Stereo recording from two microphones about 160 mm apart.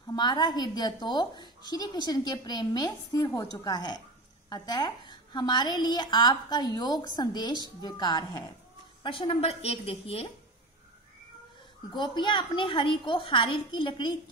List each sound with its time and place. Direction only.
0.1 s a child's voice: 25° left (ahead or behind)
11.9 s a woman's voice: 30° left (ahead or behind)